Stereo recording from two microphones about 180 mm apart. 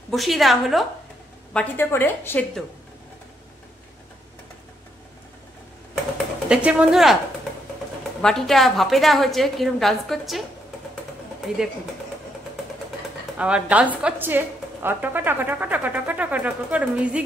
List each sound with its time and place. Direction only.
0.1 s a woman's voice: centre (ahead or behind)
6.5 s a woman's voice: 5° right (ahead or behind)
8.2 s a woman's voice: centre (ahead or behind)
13.4 s a woman's voice: 5° right (ahead or behind)